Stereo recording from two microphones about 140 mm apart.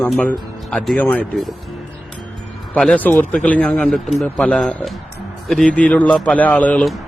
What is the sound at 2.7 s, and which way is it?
A man's voice, 5° left (ahead or behind).